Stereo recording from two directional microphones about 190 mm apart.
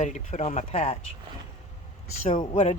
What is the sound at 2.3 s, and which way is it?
Speech, 30° left (ahead or behind).